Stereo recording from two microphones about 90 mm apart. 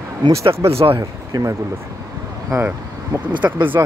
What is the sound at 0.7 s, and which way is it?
Speech, 90° right.